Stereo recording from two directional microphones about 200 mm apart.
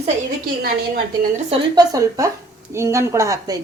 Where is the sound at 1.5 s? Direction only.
20° right (ahead or behind).